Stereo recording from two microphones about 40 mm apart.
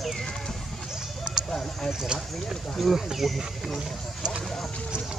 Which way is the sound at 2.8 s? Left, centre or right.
Centre.